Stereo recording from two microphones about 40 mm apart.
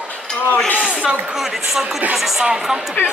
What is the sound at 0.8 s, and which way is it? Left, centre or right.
Speech, right.